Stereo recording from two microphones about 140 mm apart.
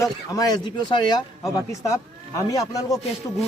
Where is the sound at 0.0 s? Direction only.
25° left (ahead or behind).